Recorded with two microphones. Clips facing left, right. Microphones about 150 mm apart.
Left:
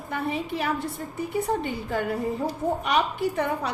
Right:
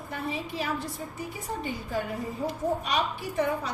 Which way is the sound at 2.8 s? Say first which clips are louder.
Left 5 dB; 60° left (ahead or behind).